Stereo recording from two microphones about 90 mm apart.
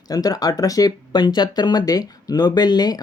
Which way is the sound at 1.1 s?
55° left (ahead or behind).